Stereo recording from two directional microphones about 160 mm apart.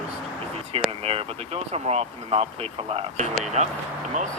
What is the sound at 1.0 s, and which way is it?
Speech, 40° right (ahead or behind).